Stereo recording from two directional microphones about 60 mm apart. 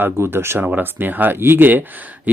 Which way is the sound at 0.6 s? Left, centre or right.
Right.